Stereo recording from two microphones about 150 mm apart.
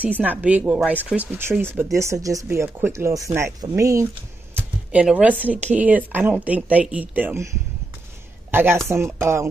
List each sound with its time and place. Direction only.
0.2 s speech: 10° right (ahead or behind)
4.6 s speech: 10° right (ahead or behind)
8.5 s speech: 15° right (ahead or behind)